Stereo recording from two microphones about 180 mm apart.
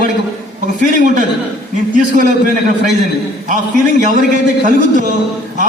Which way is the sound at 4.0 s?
45° right (ahead or behind).